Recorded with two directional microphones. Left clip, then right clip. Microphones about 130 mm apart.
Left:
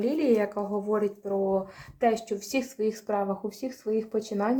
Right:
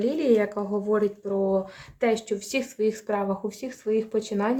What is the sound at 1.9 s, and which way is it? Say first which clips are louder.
Speech: right 1 dB; 30° right (ahead or behind).